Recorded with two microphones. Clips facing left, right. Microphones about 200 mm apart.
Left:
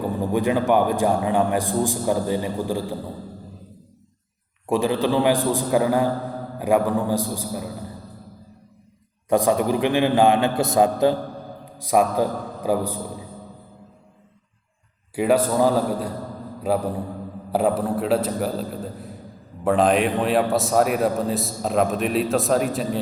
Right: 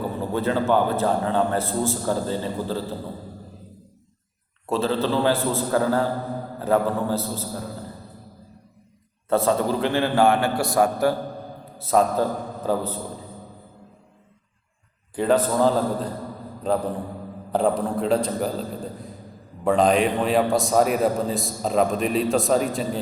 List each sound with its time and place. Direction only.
0.2 s a man's voice: 15° left (ahead or behind)
4.6 s a man's voice: 15° left (ahead or behind)
9.3 s a man's voice: 15° left (ahead or behind)
15.1 s a man's voice: 10° left (ahead or behind)